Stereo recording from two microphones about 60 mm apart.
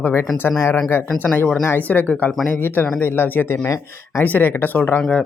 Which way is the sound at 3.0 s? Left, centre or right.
Left.